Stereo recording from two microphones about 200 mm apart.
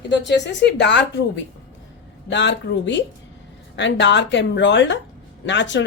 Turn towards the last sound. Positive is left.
turn(degrees=65)  # may be behind; listen again after turning